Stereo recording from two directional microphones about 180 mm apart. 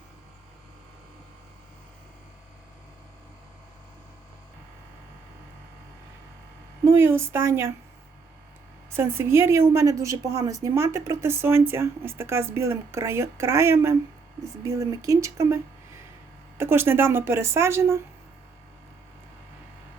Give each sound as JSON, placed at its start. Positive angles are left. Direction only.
{"t": 6.8, "sound": "a woman's voice", "side_deg": -15}
{"t": 8.9, "sound": "a woman's voice", "side_deg": -15}
{"t": 16.6, "sound": "a woman's voice", "side_deg": -10}